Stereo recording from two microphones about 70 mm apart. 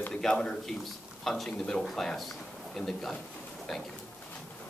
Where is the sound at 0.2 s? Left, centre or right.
Centre.